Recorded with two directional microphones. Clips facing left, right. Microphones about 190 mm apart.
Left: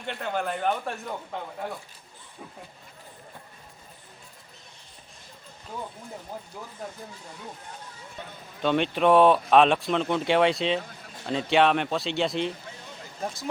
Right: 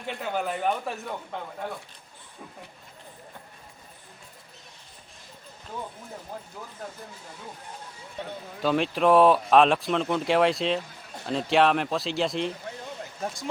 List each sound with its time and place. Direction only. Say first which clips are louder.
0.0 s speech: even; 5° right (ahead or behind)
8.6 s speech: even; centre (ahead or behind)